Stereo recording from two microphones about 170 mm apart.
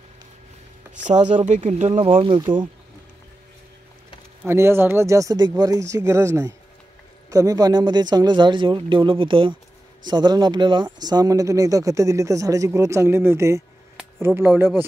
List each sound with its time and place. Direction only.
1.0 s speech: 45° right (ahead or behind)
4.4 s speech: 15° right (ahead or behind)